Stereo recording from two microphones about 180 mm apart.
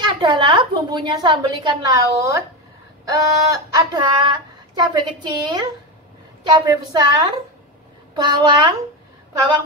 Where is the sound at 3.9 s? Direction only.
25° right (ahead or behind).